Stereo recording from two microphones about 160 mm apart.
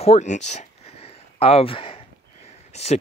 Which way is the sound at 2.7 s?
40° left (ahead or behind).